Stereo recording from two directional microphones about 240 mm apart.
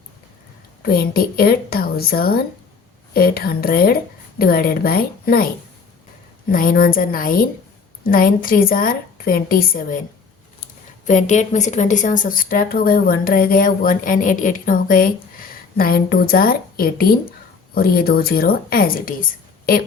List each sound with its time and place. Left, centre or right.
0.8 s a woman's voice: left
6.5 s a woman's voice: left
11.0 s a woman's voice: left